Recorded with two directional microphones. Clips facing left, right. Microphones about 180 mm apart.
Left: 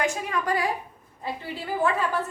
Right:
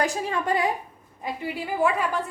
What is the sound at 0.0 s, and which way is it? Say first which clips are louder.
Speech: right 1 dB; 35° right (ahead or behind).